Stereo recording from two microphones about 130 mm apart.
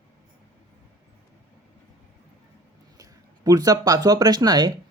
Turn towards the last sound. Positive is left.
turn(degrees=-35)  # may be behind; listen again after turning